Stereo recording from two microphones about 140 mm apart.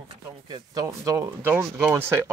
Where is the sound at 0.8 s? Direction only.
20° right (ahead or behind).